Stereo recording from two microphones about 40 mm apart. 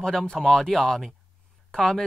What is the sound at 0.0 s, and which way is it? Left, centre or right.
Speech, centre.